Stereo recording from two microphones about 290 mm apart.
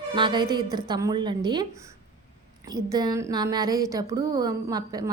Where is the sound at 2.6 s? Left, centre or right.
Centre.